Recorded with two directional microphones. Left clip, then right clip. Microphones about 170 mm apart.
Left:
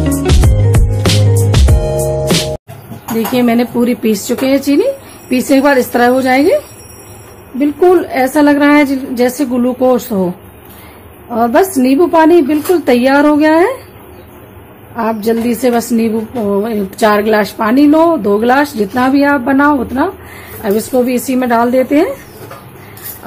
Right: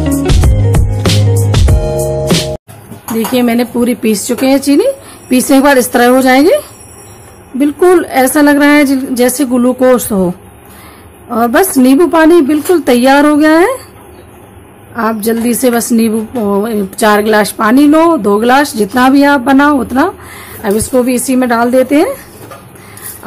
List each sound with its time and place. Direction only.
0.0 s music: centre (ahead or behind)
3.3 s a woman's voice: 10° right (ahead or behind)
15.0 s a woman's voice: 20° right (ahead or behind)